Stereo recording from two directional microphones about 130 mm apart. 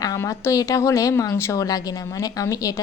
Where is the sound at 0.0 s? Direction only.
25° left (ahead or behind).